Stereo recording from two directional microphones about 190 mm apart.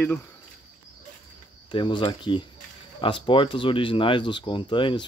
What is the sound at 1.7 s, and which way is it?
Speech, 25° left (ahead or behind).